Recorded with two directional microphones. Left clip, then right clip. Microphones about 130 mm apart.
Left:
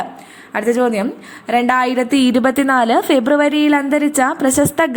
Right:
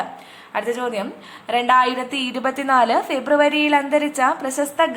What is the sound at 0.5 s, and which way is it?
A woman's voice, 40° left (ahead or behind).